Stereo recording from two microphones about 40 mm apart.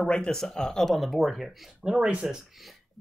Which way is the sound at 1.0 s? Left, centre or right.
Centre.